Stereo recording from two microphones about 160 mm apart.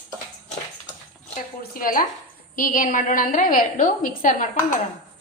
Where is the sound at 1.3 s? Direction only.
60° left (ahead or behind).